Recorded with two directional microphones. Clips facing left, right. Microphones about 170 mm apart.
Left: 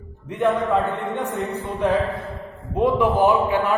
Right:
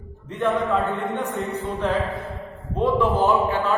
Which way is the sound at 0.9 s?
20° right (ahead or behind).